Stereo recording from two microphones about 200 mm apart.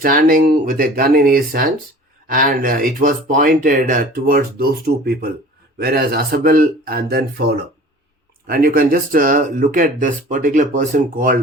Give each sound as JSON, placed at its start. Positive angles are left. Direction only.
{"t": 0.0, "sound": "speech", "side_deg": -45}